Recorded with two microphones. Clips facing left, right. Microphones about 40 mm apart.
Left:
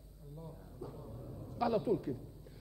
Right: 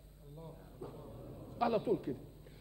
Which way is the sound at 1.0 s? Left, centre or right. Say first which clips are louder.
Left 1 dB; centre.